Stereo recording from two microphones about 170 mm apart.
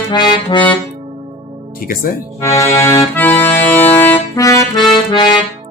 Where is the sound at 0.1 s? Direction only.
25° left (ahead or behind).